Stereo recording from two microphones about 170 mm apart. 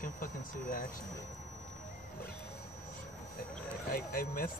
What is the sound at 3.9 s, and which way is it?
Speech, 60° left (ahead or behind).